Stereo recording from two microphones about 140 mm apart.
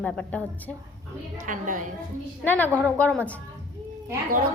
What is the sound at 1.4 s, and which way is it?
Speech, 65° right (ahead or behind).